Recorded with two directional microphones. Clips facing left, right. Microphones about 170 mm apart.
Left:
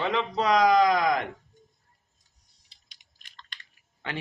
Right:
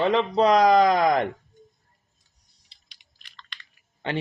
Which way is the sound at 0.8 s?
30° right (ahead or behind).